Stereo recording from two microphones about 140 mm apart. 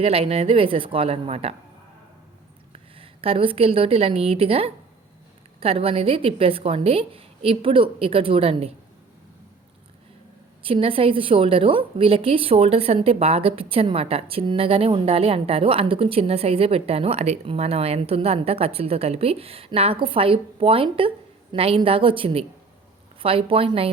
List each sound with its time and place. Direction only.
0.0 s a woman's voice: 45° right (ahead or behind)
2.7 s a woman's voice: 40° right (ahead or behind)
10.6 s a woman's voice: 40° right (ahead or behind)